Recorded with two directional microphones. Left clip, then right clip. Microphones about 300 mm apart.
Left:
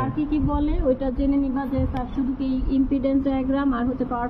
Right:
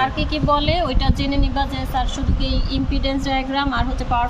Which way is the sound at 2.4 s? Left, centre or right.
Centre.